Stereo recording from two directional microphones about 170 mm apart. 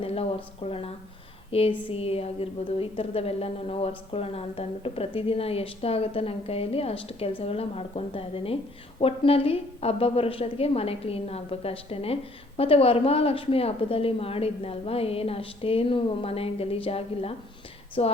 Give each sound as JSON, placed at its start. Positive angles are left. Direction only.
{"t": 0.0, "sound": "a woman's voice", "side_deg": 35}